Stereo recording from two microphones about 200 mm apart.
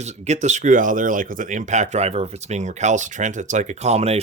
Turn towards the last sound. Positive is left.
turn(degrees=-30)  # may be behind; listen again after turning